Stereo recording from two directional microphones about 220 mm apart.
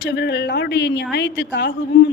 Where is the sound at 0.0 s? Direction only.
50° left (ahead or behind).